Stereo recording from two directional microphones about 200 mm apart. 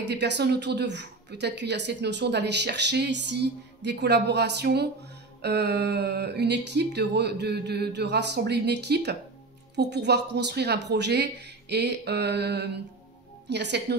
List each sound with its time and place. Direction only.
0.0 s a woman's voice: 60° right (ahead or behind)